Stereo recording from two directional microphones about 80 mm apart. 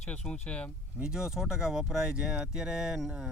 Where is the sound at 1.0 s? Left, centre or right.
Centre.